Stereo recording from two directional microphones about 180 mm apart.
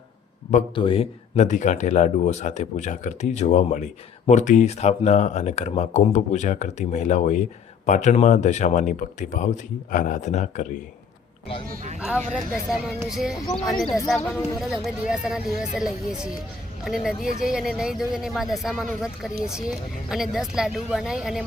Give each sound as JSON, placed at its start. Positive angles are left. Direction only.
{"t": 0.8, "sound": "speech", "side_deg": 30}
{"t": 11.7, "sound": "speech", "side_deg": -45}
{"t": 11.9, "sound": "speech", "side_deg": -5}